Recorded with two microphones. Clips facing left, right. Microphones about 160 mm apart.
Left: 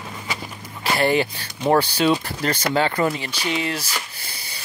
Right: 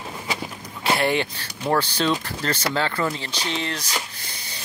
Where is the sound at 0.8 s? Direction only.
Centre (ahead or behind).